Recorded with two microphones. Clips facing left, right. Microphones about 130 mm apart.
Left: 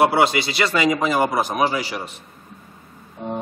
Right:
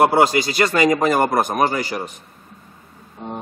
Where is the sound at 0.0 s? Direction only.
45° right (ahead or behind).